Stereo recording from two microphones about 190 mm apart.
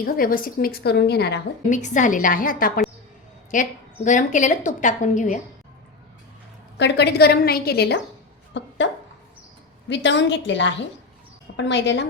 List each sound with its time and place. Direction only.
0.0 s a woman's voice: 50° left (ahead or behind)
1.7 s a woman's voice: 40° left (ahead or behind)
6.7 s a woman's voice: 65° left (ahead or behind)
8.5 s dog: 70° left (ahead or behind)
9.9 s a woman's voice: 70° left (ahead or behind)